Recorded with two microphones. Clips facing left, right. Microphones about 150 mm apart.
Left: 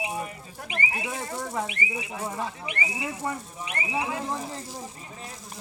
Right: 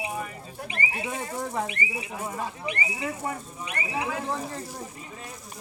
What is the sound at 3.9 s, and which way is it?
Speech, 15° left (ahead or behind).